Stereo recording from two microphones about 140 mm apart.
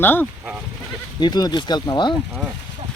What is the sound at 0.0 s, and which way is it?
Speech, 15° left (ahead or behind).